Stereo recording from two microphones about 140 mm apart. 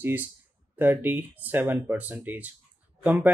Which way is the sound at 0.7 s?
15° right (ahead or behind).